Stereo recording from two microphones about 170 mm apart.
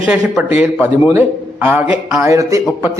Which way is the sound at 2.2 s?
20° right (ahead or behind).